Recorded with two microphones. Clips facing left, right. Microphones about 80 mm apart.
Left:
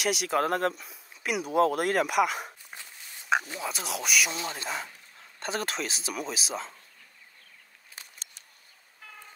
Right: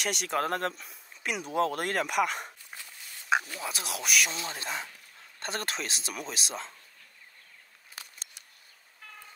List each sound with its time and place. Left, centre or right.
0.0 s speech: centre
2.7 s dog: centre
3.6 s speech: centre
4.4 s speech: left
4.6 s speech: centre